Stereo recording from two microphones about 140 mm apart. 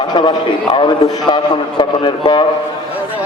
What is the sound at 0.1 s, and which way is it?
A man's voice, 30° left (ahead or behind).